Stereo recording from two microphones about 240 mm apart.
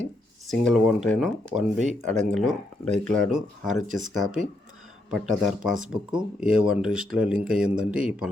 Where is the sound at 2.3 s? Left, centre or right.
Centre.